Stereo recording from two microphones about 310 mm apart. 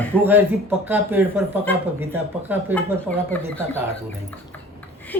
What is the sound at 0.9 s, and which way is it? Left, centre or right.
Speech, centre.